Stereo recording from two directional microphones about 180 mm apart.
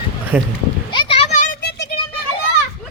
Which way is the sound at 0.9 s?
30° left (ahead or behind).